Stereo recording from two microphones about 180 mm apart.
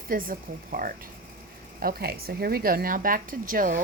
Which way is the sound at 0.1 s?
50° right (ahead or behind).